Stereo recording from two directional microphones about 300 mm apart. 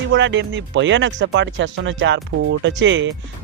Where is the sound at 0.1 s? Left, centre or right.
Right.